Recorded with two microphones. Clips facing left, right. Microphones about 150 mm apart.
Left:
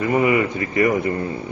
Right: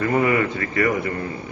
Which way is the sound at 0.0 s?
15° left (ahead or behind).